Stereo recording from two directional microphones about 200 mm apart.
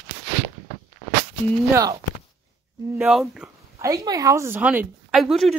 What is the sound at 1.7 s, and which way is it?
Speech, 15° right (ahead or behind).